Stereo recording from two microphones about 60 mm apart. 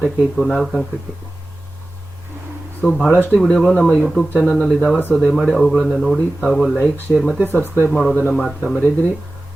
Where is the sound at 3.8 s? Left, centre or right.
Left.